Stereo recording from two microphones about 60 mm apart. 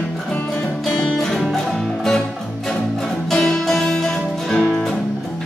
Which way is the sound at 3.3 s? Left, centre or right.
Centre.